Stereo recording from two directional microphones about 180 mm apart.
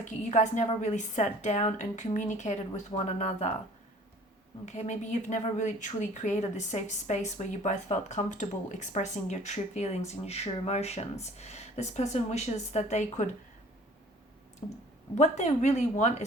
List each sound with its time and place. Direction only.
0.0 s speech: 40° left (ahead or behind)
4.6 s speech: 40° left (ahead or behind)
14.6 s speech: 30° left (ahead or behind)
15.1 s speech: 40° left (ahead or behind)